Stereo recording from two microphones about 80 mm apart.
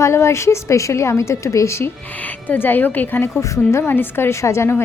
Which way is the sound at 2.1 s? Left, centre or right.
Left.